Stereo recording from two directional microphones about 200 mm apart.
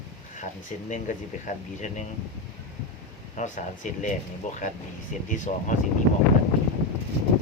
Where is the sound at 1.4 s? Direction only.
35° left (ahead or behind).